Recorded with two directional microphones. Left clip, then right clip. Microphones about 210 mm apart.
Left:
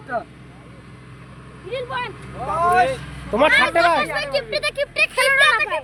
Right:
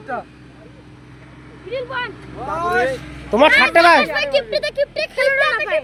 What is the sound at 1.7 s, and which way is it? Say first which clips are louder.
Speech: right 2 dB; 25° left (ahead or behind).